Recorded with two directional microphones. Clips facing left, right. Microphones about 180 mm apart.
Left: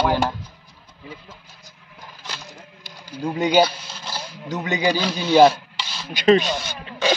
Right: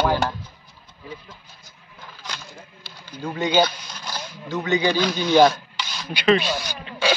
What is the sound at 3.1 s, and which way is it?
Speech, 10° left (ahead or behind).